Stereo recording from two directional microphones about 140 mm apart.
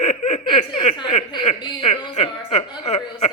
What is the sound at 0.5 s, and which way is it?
Speech, 55° left (ahead or behind).